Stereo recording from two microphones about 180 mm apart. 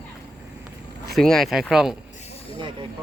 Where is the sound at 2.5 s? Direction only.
25° right (ahead or behind).